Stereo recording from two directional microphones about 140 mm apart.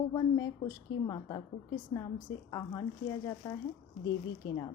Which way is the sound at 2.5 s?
30° left (ahead or behind).